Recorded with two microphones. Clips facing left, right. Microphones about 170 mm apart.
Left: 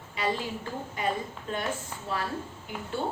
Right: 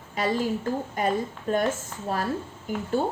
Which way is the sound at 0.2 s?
45° right (ahead or behind).